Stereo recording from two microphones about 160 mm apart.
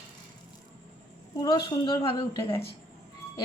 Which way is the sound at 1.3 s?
25° left (ahead or behind).